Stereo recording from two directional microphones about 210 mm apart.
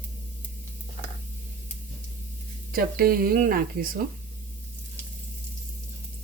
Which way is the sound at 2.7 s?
45° right (ahead or behind).